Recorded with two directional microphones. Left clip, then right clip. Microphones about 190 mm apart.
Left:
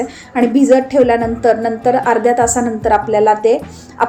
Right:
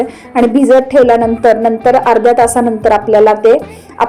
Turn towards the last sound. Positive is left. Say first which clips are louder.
# right 5 dB
turn(degrees=0)  # may be behind; listen again after turning